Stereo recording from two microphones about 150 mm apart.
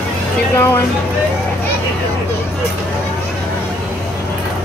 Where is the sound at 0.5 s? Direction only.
15° left (ahead or behind).